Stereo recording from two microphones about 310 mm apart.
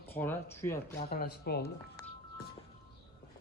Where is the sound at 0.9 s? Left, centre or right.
Left.